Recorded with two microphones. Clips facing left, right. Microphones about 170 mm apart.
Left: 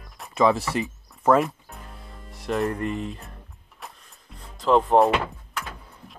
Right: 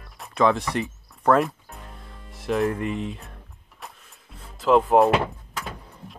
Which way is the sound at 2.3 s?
Centre (ahead or behind).